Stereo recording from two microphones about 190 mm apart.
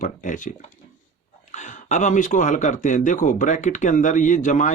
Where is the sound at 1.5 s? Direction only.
40° left (ahead or behind).